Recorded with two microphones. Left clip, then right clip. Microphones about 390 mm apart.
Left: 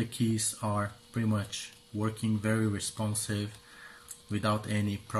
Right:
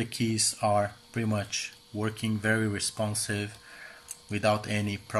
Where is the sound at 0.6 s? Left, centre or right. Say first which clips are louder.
Right 8 dB; centre.